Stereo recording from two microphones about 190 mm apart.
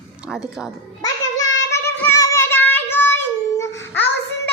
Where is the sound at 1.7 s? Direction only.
10° left (ahead or behind).